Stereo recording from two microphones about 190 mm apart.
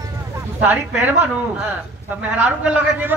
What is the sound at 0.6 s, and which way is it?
A man's voice, 10° right (ahead or behind).